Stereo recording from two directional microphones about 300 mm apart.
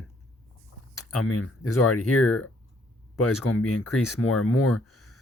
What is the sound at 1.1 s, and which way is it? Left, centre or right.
Speech, left.